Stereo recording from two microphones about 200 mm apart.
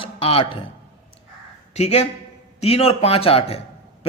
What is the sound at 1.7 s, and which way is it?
A man's voice, 30° left (ahead or behind).